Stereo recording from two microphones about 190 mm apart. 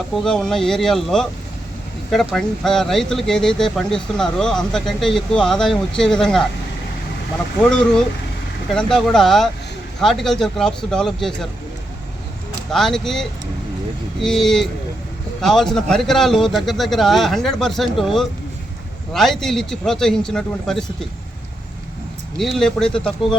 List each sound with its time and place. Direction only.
0.2 s speech: 5° left (ahead or behind)
7.6 s speech: 5° left (ahead or behind)
12.7 s speech: centre (ahead or behind)
22.4 s speech: centre (ahead or behind)